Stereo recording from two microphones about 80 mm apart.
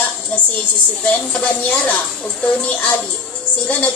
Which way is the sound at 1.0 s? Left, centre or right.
Centre.